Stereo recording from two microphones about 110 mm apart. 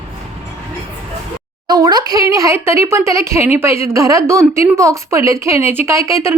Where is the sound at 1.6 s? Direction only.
35° right (ahead or behind).